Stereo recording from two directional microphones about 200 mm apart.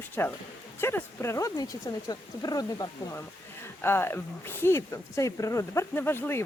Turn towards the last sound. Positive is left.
turn(degrees=10)  # may be behind; listen again after turning